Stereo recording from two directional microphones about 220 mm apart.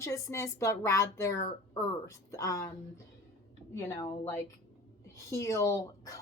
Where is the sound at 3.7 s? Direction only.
10° left (ahead or behind).